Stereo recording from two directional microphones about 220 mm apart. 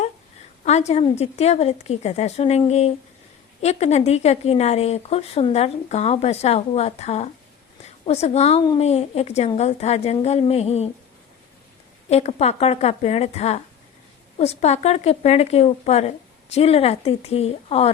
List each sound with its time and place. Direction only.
0.6 s speech: 30° left (ahead or behind)
12.0 s speech: 30° left (ahead or behind)